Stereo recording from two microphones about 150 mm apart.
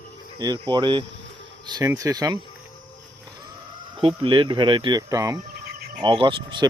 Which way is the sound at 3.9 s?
35° right (ahead or behind).